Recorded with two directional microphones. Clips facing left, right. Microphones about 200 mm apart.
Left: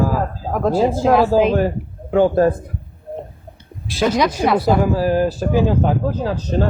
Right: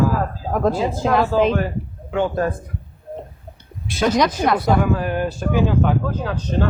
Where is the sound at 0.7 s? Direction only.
35° left (ahead or behind).